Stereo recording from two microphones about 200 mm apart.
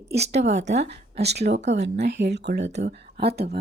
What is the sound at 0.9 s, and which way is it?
Speech, 55° right (ahead or behind).